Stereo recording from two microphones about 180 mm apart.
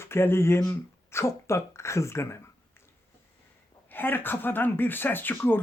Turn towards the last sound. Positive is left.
turn(degrees=10)  # may be behind; listen again after turning